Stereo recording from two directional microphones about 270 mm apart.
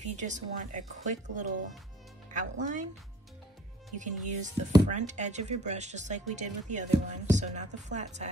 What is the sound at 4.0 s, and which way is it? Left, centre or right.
Speech, right.